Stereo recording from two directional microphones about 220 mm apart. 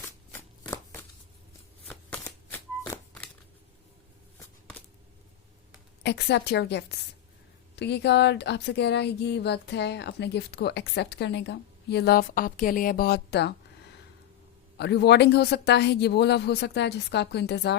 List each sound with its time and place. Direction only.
0.3 s shuffling cards: 10° left (ahead or behind)
6.0 s speech: 50° left (ahead or behind)
14.8 s speech: 50° left (ahead or behind)